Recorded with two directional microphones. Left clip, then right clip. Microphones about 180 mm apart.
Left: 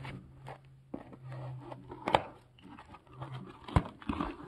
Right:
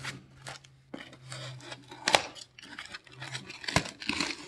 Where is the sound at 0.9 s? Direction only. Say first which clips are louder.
Right 3 dB; 20° right (ahead or behind).